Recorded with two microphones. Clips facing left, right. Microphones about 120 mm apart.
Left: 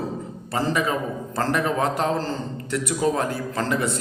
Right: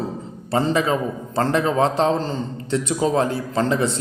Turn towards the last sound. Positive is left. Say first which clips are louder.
# right 4 dB
turn(degrees=-25)  # may be behind; listen again after turning